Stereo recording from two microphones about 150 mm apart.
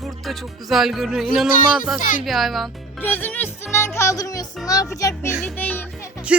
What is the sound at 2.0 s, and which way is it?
Speech, 65° left (ahead or behind).